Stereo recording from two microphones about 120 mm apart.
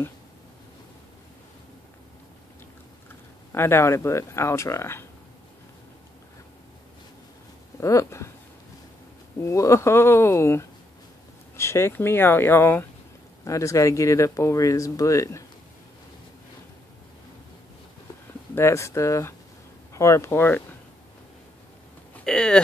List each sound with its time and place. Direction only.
3.1 s speech: 20° left (ahead or behind)
7.8 s speech: 25° left (ahead or behind)
9.4 s speech: 25° left (ahead or behind)
18.5 s speech: 25° left (ahead or behind)
22.1 s speech: 5° left (ahead or behind)